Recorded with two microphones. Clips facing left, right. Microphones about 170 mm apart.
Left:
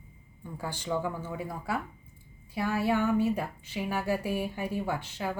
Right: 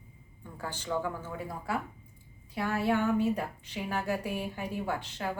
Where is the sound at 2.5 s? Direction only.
5° left (ahead or behind).